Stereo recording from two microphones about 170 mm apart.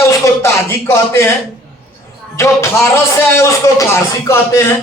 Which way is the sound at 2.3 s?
15° left (ahead or behind).